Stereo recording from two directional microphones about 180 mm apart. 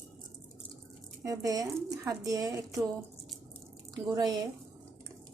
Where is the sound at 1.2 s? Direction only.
20° right (ahead or behind).